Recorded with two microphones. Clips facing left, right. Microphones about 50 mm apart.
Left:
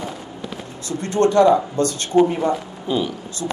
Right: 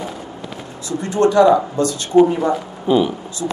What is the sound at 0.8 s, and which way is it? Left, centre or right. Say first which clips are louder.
Speech: right 1 dB; left.